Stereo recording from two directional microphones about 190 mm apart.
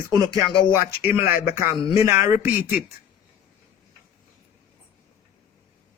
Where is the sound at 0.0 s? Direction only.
20° right (ahead or behind).